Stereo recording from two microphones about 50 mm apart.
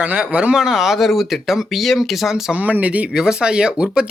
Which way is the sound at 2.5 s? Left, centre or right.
Right.